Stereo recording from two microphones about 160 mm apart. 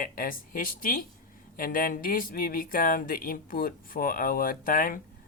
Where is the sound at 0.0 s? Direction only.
60° left (ahead or behind).